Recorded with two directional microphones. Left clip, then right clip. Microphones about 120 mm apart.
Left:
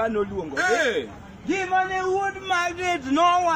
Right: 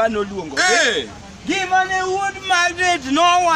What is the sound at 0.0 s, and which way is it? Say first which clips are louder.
Speech: right 5 dB; 20° right (ahead or behind).